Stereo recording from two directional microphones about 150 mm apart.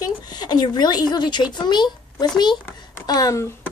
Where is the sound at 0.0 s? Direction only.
25° left (ahead or behind).